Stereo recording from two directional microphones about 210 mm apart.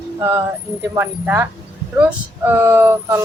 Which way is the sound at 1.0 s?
10° right (ahead or behind).